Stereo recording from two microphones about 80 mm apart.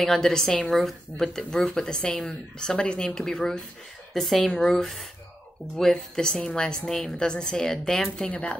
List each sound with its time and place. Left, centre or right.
0.0 s speech: centre